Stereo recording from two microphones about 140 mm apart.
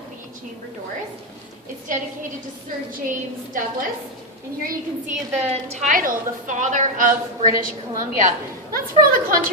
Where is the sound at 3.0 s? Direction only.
75° right (ahead or behind).